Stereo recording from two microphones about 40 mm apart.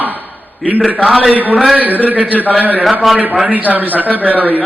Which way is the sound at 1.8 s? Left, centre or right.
Right.